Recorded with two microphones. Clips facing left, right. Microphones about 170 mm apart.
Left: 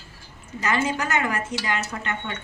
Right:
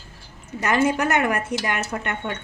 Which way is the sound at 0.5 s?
60° right (ahead or behind).